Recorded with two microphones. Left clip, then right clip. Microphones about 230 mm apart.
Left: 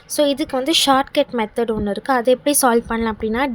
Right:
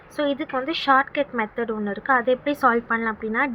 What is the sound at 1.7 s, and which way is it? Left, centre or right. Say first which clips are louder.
Speech: right 2 dB; left.